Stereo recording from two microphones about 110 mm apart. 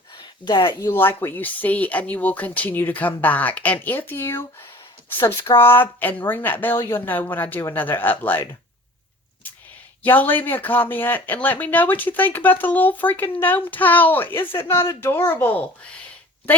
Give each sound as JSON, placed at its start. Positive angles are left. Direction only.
{"t": 0.2, "sound": "speech", "side_deg": 45}
{"t": 0.9, "sound": "speech", "side_deg": 20}
{"t": 5.5, "sound": "speech", "side_deg": 40}
{"t": 5.8, "sound": "speech", "side_deg": 15}
{"t": 10.0, "sound": "speech", "side_deg": 15}